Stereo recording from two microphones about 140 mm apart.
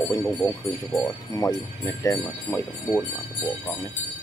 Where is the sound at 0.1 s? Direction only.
20° left (ahead or behind).